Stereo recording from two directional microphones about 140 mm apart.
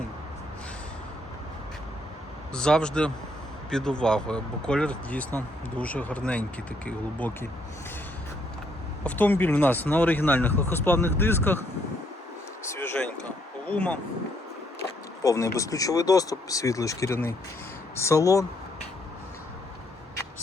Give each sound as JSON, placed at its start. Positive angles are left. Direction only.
{"t": 2.5, "sound": "speech", "side_deg": 5}
{"t": 9.0, "sound": "speech", "side_deg": 15}
{"t": 12.6, "sound": "a sound", "side_deg": 20}
{"t": 15.2, "sound": "speech", "side_deg": 20}